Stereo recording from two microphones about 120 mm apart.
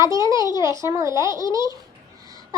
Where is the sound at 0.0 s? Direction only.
25° right (ahead or behind).